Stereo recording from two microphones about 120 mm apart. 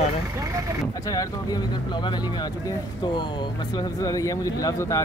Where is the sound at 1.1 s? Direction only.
30° left (ahead or behind).